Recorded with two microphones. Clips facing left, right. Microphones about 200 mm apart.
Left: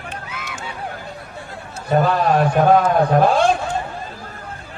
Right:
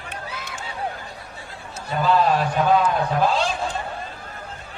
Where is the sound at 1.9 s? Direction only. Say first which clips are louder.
Left 3 dB; 55° left (ahead or behind).